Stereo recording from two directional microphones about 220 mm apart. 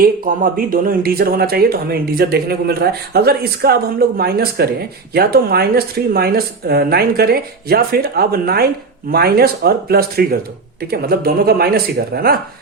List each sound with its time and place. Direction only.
0.0 s speech: 40° right (ahead or behind)